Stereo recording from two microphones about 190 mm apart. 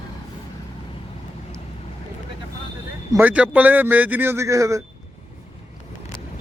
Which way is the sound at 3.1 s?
10° right (ahead or behind).